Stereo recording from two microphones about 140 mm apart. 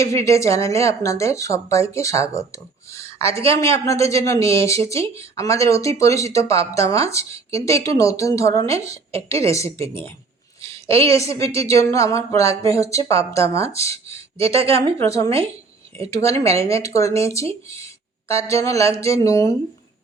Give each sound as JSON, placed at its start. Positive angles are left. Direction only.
{"t": 0.0, "sound": "speech", "side_deg": 20}
{"t": 11.1, "sound": "speech", "side_deg": 20}
{"t": 18.4, "sound": "speech", "side_deg": 20}